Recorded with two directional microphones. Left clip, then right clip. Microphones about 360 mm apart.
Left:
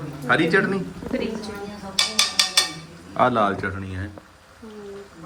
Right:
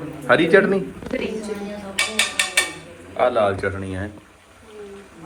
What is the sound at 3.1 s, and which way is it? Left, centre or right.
Speech, centre.